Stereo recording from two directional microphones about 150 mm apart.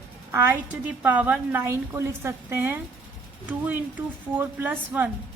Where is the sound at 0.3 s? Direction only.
15° right (ahead or behind).